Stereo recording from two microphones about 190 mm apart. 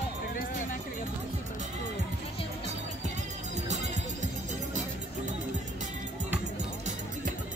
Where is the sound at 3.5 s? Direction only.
40° right (ahead or behind).